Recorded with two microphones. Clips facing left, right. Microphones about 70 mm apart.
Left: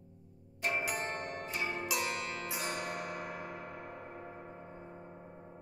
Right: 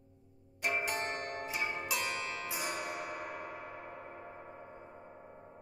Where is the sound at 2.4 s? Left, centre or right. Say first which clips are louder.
Even; centre.